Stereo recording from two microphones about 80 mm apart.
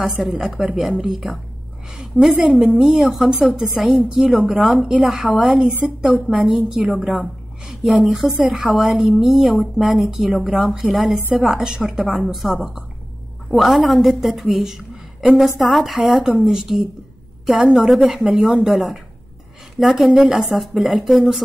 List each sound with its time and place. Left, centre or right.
0.2 s a woman's voice: centre
2.3 s a woman's voice: centre
2.6 s a woman's voice: centre
5.9 s a woman's voice: centre
6.2 s a woman's voice: centre
7.2 s a sound: centre
8.0 s a woman's voice: centre
13.6 s a woman's voice: centre